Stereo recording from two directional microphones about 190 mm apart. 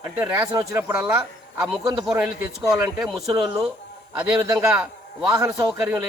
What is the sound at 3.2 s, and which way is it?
Speech, 20° right (ahead or behind).